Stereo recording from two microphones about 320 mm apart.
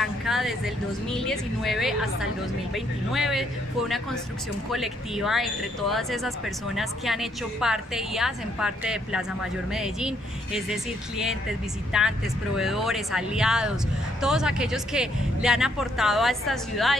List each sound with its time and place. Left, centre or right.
0.0 s a sound: centre
1.0 s speech: centre
4.6 s speech: centre